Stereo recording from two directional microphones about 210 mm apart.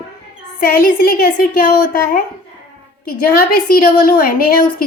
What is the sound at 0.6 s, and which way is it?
Speech, 45° left (ahead or behind).